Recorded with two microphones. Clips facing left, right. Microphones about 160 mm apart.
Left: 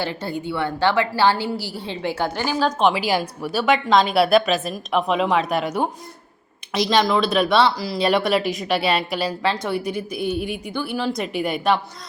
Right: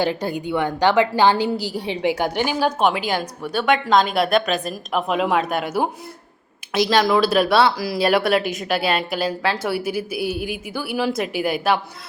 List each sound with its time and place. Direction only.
0.0 s a woman's voice: 15° right (ahead or behind)
2.9 s speech: 5° left (ahead or behind)